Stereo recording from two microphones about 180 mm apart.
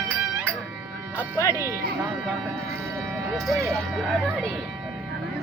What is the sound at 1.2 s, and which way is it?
Music, 15° left (ahead or behind).